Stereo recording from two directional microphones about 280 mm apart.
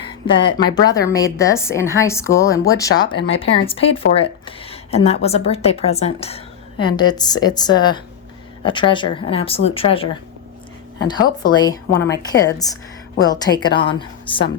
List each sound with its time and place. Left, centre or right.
0.1 s a woman's voice: centre
11.4 s a woman's voice: centre